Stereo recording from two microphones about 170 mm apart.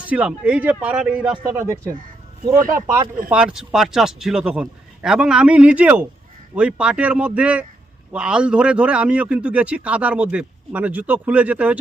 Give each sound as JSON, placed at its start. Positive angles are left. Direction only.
{"t": 0.0, "sound": "a man's voice", "side_deg": -10}
{"t": 1.5, "sound": "a man's voice", "side_deg": -15}